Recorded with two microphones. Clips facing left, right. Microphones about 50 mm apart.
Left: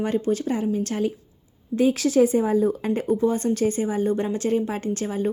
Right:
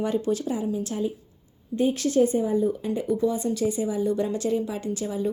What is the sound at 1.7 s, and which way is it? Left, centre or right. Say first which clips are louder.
A woman's voice: left 3 dB; left.